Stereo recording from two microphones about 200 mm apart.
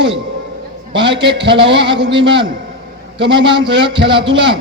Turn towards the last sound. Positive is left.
turn(degrees=-25)  # may be behind; listen again after turning